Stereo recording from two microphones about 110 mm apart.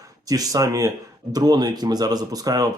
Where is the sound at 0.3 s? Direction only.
35° right (ahead or behind).